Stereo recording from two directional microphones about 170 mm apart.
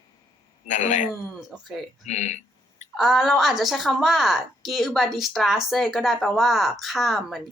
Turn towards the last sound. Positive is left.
turn(degrees=0)  # may be behind; listen again after turning